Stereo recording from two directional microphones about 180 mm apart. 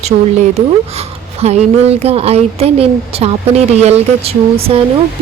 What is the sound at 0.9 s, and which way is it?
Speech, 35° right (ahead or behind).